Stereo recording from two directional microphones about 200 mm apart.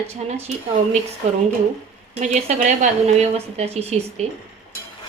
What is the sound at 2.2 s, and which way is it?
A woman's voice, 35° right (ahead or behind).